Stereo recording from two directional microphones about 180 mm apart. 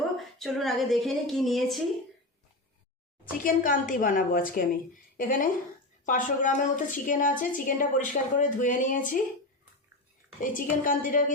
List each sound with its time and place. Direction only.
0.2 s a woman's voice: centre (ahead or behind)
3.4 s a woman's voice: 50° left (ahead or behind)
10.4 s a woman's voice: 50° left (ahead or behind)